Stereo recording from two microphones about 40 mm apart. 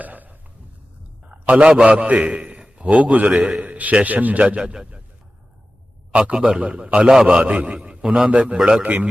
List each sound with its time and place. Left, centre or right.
0.0 s a sound: right
1.3 s a sound: right
1.8 s a man's voice: right
4.4 s a man's voice: right
6.3 s a man's voice: centre
6.6 s a man's voice: right
7.0 s a man's voice: centre
7.3 s a man's voice: right